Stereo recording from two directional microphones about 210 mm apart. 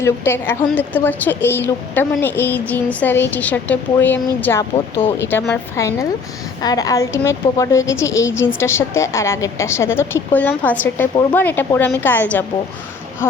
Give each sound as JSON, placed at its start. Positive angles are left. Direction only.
{"t": 0.0, "sound": "a woman's voice", "side_deg": 10}